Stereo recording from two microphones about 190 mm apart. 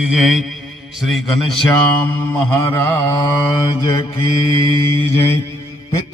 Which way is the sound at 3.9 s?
25° left (ahead or behind).